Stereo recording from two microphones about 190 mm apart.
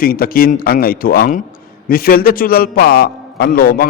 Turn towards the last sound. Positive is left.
turn(degrees=50)  # may be behind; listen again after turning